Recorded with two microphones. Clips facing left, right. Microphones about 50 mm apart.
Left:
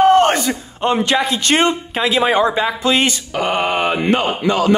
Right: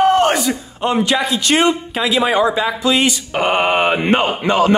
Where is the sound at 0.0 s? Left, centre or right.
Left.